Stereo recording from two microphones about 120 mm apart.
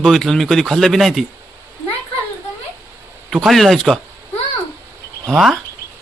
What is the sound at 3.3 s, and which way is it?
Speech, centre (ahead or behind).